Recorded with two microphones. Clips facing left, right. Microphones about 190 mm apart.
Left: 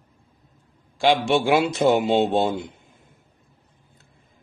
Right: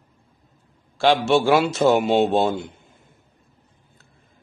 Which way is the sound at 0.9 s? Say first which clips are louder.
Right 2 dB; 15° left (ahead or behind).